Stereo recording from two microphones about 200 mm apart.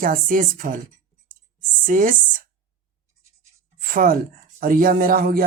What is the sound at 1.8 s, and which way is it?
Speech, 40° right (ahead or behind).